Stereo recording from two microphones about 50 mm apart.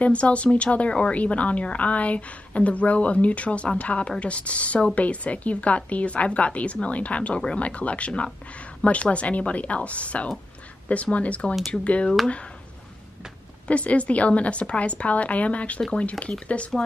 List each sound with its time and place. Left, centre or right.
0.0 s speech: left
13.7 s speech: left